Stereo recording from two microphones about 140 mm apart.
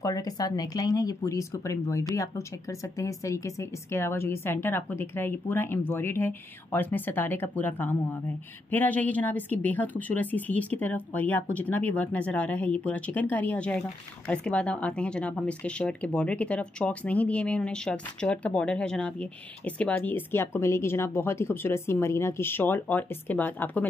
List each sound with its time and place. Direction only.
0.0 s speech: 25° left (ahead or behind)